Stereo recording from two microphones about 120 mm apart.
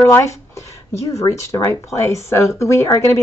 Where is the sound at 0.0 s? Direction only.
25° left (ahead or behind).